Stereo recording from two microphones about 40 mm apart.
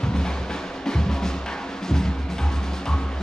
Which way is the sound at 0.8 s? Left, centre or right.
Centre.